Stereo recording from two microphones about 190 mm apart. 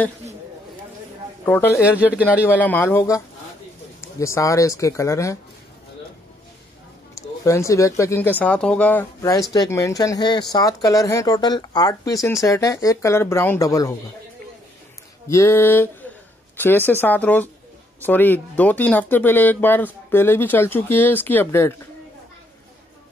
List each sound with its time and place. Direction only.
1.4 s a man's voice: 10° left (ahead or behind)
1.8 s speech: 5° right (ahead or behind)
2.4 s speech: 10° left (ahead or behind)
7.2 s speech: 15° left (ahead or behind)
15.2 s speech: 15° left (ahead or behind)